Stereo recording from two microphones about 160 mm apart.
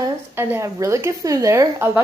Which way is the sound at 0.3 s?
15° right (ahead or behind).